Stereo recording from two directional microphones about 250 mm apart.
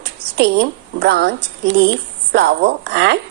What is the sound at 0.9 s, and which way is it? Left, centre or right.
A woman's voice, right.